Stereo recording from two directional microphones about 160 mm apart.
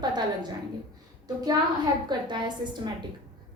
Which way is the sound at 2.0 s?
30° right (ahead or behind).